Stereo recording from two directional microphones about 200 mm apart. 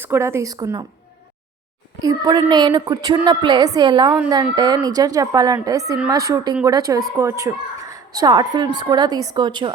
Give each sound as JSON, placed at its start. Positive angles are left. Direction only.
{"t": 0.0, "sound": "speech", "side_deg": -10}
{"t": 2.0, "sound": "speech", "side_deg": -20}